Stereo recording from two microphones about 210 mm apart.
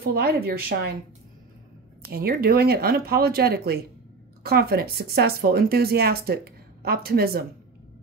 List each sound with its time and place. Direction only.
0.0 s speech: 50° right (ahead or behind)
2.0 s speech: 45° right (ahead or behind)